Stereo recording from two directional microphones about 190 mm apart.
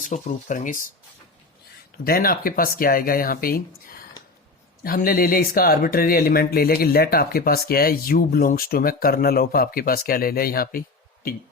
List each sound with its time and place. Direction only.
0.0 s speech: 40° left (ahead or behind)
2.0 s speech: 50° left (ahead or behind)